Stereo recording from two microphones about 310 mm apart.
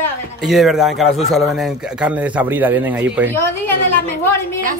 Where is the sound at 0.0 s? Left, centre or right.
Centre.